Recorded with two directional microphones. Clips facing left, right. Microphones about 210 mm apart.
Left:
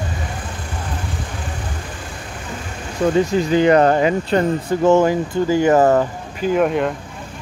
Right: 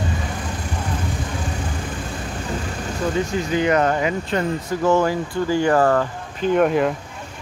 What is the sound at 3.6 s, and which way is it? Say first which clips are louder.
Speech: left 5 dB; 35° left (ahead or behind).